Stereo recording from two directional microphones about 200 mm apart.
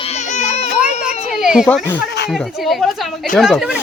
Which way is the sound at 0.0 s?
35° left (ahead or behind).